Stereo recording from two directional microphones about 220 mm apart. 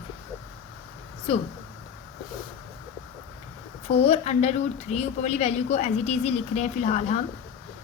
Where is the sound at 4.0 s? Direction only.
30° left (ahead or behind).